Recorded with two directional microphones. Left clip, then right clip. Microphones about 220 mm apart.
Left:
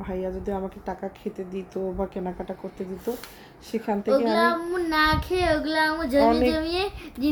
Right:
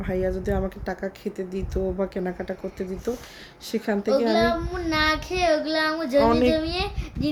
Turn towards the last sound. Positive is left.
turn(degrees=15)  # may be behind; listen again after turning